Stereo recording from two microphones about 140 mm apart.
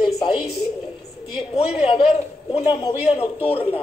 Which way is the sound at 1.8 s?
40° left (ahead or behind).